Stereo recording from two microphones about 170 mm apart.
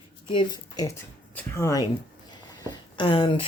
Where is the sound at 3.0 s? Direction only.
30° left (ahead or behind).